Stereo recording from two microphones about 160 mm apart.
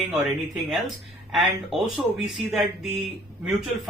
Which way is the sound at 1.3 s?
Centre (ahead or behind).